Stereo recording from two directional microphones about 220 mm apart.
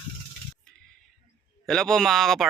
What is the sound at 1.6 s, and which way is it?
Speech, 5° left (ahead or behind).